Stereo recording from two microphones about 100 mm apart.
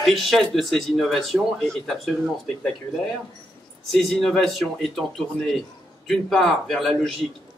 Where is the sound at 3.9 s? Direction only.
5° left (ahead or behind).